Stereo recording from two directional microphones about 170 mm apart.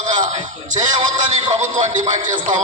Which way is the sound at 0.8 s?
25° right (ahead or behind).